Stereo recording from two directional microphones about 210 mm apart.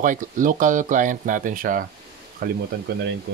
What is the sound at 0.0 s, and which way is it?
Speech, 40° right (ahead or behind).